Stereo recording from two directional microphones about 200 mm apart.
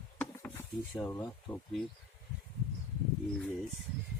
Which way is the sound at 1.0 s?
10° left (ahead or behind).